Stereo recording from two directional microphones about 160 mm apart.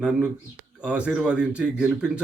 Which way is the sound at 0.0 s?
5° right (ahead or behind).